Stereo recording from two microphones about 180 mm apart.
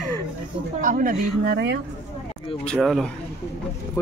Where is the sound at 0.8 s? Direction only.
45° right (ahead or behind); by 1.8 s 65° right (ahead or behind).